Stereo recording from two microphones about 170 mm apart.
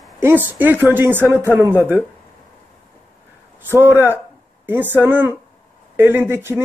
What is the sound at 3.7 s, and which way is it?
A woman's voice, 10° right (ahead or behind).